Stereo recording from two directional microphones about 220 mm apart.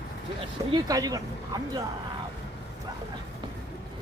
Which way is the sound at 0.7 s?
20° right (ahead or behind).